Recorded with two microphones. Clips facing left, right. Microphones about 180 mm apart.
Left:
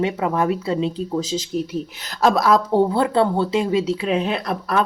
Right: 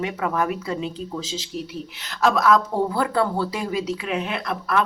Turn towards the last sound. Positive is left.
turn(degrees=35)  # may be behind; listen again after turning